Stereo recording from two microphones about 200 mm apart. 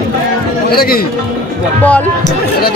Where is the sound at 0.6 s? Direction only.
50° left (ahead or behind).